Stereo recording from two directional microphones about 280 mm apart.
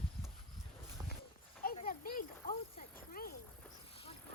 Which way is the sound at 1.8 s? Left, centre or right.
Left.